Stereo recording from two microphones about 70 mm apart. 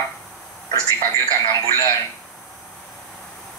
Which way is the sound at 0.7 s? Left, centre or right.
Left.